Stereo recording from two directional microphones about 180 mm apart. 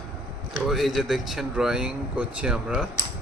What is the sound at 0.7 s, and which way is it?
Speech, centre (ahead or behind).